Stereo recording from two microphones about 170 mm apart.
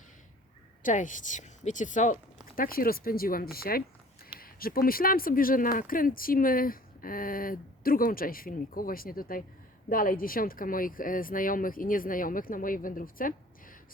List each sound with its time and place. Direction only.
0.8 s a woman's voice: 50° left (ahead or behind)
2.6 s speech: 60° left (ahead or behind)